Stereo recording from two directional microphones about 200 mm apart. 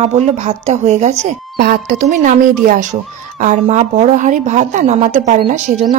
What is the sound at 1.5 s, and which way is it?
A woman's voice, 45° right (ahead or behind).